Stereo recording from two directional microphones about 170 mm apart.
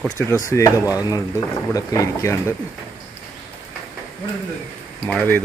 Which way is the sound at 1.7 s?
20° left (ahead or behind).